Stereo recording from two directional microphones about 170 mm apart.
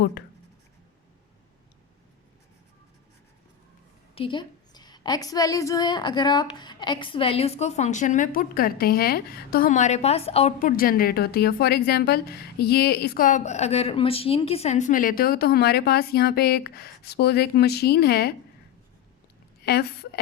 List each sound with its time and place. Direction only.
4.1 s a woman's voice: 30° left (ahead or behind)
10.6 s a woman's voice: 55° left (ahead or behind)
19.6 s a woman's voice: 70° left (ahead or behind)